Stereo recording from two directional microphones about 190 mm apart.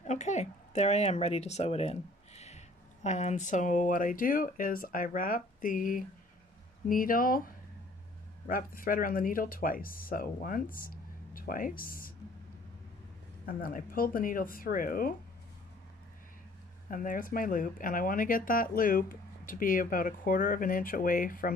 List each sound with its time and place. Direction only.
0.0 s speech: 40° left (ahead or behind)
13.5 s speech: 45° left (ahead or behind)
16.9 s speech: 45° left (ahead or behind)